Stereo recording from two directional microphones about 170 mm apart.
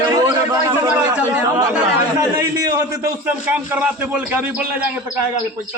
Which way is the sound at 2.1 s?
20° right (ahead or behind).